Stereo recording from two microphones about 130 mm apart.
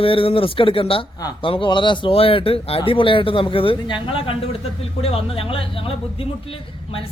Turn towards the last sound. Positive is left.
turn(degrees=45)  # may be behind; listen again after turning